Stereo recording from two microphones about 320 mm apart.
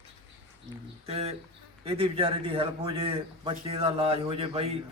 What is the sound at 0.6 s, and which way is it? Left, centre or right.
A man's voice, centre.